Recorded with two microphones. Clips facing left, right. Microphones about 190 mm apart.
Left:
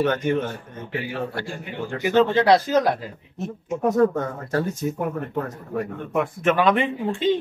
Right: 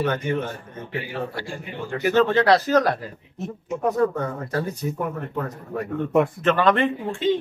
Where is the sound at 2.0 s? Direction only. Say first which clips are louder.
Left 1 dB; 15° left (ahead or behind).